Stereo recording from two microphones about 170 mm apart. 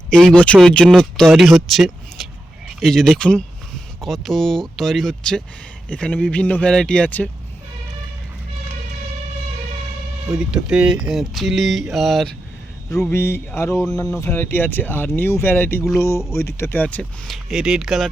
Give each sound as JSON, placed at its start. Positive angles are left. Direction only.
{"t": 0.1, "sound": "speech", "side_deg": 5}
{"t": 10.3, "sound": "speech", "side_deg": -5}
{"t": 13.1, "sound": "speech", "side_deg": 15}